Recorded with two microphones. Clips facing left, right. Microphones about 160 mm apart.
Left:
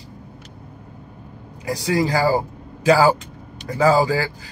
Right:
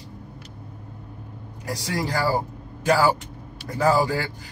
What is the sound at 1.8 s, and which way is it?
A man's voice, 90° left.